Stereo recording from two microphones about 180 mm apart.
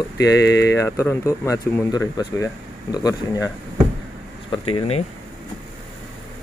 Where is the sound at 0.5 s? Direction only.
70° left (ahead or behind).